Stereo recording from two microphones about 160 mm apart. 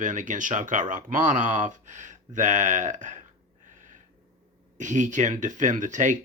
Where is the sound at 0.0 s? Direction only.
50° right (ahead or behind).